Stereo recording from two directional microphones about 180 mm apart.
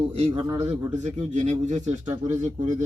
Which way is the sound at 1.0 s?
40° right (ahead or behind).